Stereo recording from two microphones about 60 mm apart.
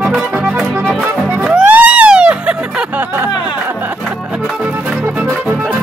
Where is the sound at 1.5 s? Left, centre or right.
Right.